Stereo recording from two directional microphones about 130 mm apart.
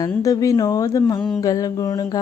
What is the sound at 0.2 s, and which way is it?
A woman's voice, 25° left (ahead or behind).